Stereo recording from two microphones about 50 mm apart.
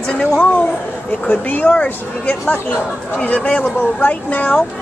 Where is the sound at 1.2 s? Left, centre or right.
Left.